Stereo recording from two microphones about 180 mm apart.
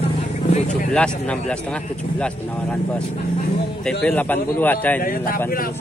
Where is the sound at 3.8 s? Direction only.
5° left (ahead or behind).